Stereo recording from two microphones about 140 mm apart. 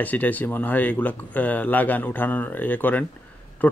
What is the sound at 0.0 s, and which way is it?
Speech, 10° left (ahead or behind).